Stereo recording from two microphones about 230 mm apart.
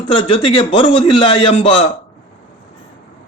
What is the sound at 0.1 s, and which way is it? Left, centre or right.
Speech, left.